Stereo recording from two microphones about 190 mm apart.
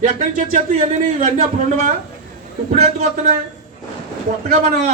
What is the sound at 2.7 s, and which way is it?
Speech, 35° right (ahead or behind).